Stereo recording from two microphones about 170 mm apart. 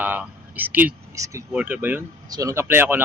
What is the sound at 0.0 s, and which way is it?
Speech, 10° right (ahead or behind).